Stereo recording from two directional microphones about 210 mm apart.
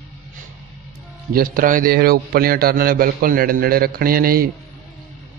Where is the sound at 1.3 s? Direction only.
45° right (ahead or behind).